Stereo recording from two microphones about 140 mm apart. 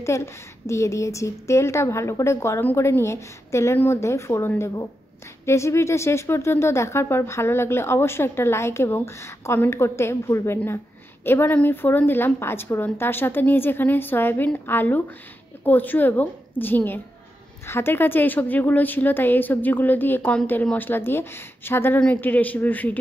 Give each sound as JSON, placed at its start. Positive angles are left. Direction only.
{"t": 0.0, "sound": "a woman's voice", "side_deg": 20}